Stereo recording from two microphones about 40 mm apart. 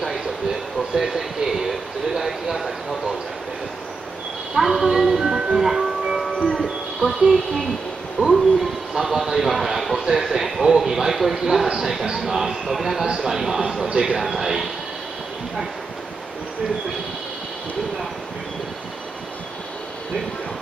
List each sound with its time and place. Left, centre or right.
0.9 s a sound: centre
4.6 s speech: centre
5.6 s music: centre
6.4 s music: centre
7.0 s speech: centre
8.2 s a sound: right
8.9 s a man's voice: centre